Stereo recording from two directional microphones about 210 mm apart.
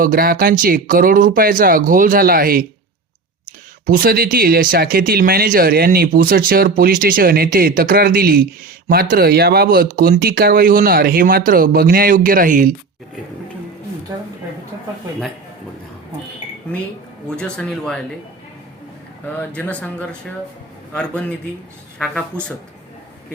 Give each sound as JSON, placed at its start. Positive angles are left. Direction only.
{"t": 0.0, "sound": "speech", "side_deg": -45}
{"t": 3.8, "sound": "speech", "side_deg": -45}
{"t": 17.2, "sound": "speech", "side_deg": 5}
{"t": 19.4, "sound": "speech", "side_deg": 5}